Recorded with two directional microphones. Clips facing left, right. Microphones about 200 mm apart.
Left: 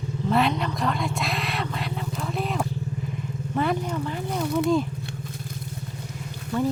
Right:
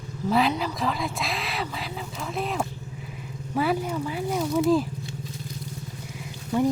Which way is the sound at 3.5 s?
5° right (ahead or behind).